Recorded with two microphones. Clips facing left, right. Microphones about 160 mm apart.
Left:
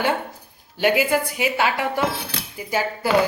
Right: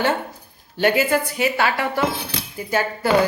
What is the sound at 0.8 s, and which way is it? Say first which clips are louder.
A woman's voice: right 1 dB; 10° left (ahead or behind).